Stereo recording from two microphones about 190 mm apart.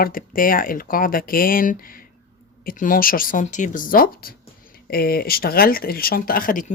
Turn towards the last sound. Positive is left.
turn(degrees=45)  # may be behind; listen again after turning